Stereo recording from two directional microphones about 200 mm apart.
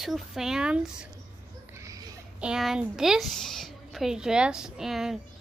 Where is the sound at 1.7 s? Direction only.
15° right (ahead or behind).